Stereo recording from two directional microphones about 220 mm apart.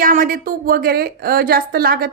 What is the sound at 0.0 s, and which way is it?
A woman's voice, 40° right (ahead or behind).